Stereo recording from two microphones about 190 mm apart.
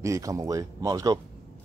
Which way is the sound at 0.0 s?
15° right (ahead or behind).